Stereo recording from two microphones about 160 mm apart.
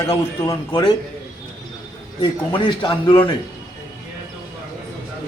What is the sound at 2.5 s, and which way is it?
Speech, 30° left (ahead or behind).